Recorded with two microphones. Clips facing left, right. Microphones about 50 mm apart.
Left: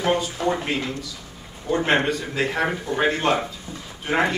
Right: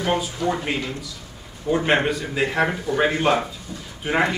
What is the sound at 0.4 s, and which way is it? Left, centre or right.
Speech, left.